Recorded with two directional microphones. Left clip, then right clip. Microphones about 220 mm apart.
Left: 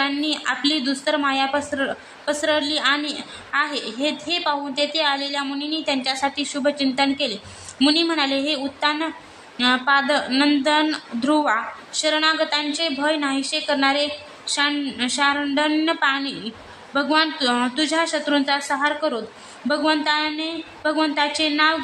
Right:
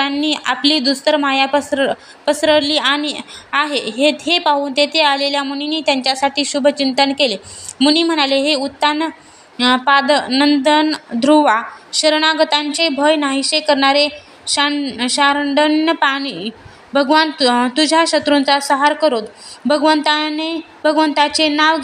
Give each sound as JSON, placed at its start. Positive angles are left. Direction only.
{"t": 0.0, "sound": "speech", "side_deg": -20}